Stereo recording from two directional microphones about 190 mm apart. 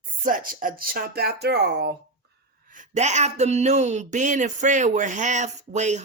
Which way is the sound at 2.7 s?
35° right (ahead or behind).